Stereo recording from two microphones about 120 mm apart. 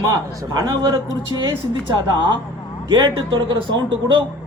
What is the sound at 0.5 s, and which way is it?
Speech, 35° right (ahead or behind).